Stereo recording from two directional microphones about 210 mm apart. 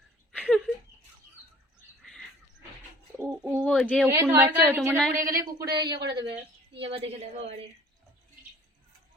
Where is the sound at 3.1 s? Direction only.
10° right (ahead or behind).